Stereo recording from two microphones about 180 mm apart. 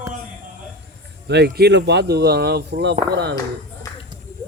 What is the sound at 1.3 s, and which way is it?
Speech, 65° right (ahead or behind).